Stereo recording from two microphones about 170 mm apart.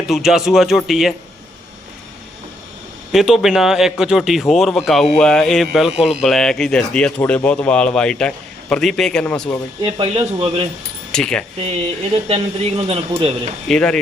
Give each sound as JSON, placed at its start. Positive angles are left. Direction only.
{"t": 0.1, "sound": "speech", "side_deg": 0}
{"t": 3.1, "sound": "speech", "side_deg": 0}
{"t": 9.8, "sound": "speech", "side_deg": -35}
{"t": 11.1, "sound": "speech", "side_deg": 5}
{"t": 12.1, "sound": "speech", "side_deg": -35}
{"t": 13.7, "sound": "speech", "side_deg": 5}